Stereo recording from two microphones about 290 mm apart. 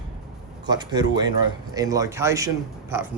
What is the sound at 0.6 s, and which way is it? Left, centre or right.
A man's voice, centre.